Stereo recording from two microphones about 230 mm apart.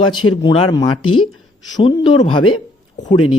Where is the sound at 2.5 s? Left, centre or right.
Left.